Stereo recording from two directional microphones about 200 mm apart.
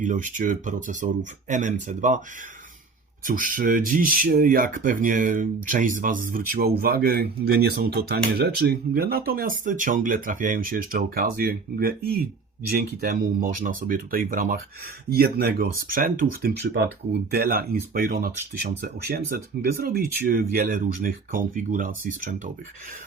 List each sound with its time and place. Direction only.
0.0 s speech: 40° right (ahead or behind)
3.2 s speech: 45° right (ahead or behind)